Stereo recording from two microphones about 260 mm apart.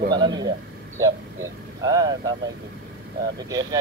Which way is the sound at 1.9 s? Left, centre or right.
Centre.